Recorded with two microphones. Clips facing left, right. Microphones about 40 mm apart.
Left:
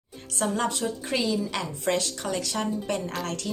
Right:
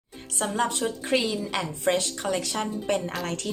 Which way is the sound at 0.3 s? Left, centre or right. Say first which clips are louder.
Even; centre.